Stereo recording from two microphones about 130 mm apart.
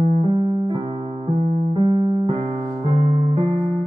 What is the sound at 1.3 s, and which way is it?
Piano, 45° right (ahead or behind).